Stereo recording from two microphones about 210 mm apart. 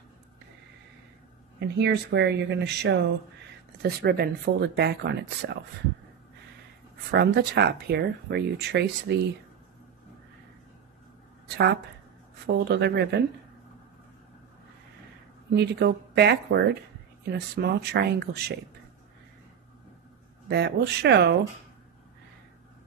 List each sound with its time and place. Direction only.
1.6 s speech: 55° right (ahead or behind)
7.1 s speech: 50° right (ahead or behind)
11.4 s a woman's voice: 55° right (ahead or behind)
15.5 s speech: 55° right (ahead or behind)
20.4 s speech: 55° right (ahead or behind)